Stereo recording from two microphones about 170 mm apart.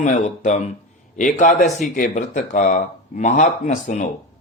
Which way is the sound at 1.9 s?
50° left (ahead or behind).